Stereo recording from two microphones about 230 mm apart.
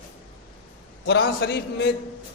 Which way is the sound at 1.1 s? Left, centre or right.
Left.